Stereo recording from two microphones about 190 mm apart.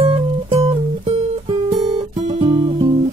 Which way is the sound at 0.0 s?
25° right (ahead or behind).